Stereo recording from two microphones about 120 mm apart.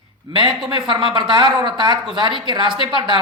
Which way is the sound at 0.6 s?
45° right (ahead or behind).